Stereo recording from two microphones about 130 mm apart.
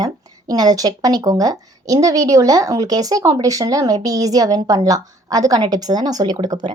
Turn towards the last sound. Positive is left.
turn(degrees=-30)  # may be behind; listen again after turning